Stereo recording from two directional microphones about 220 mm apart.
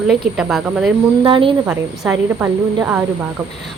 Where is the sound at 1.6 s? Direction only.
5° right (ahead or behind).